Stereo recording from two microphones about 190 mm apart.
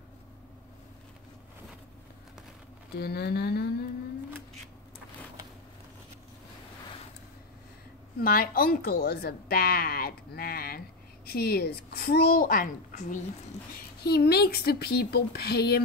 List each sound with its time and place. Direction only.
3.0 s speech: 55° left (ahead or behind)
8.2 s speech: 50° left (ahead or behind)
14.0 s speech: 55° left (ahead or behind)